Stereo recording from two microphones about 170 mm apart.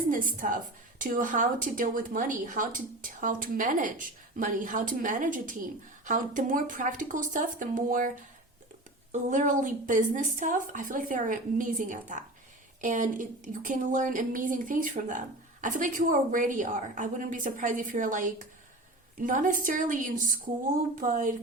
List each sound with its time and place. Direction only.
0.1 s a woman's voice: 55° right (ahead or behind)
9.3 s a woman's voice: 50° right (ahead or behind)